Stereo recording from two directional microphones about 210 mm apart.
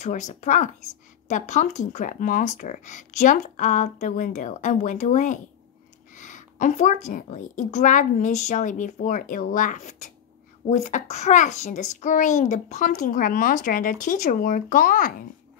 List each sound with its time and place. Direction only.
0.0 s a child's voice: 35° left (ahead or behind)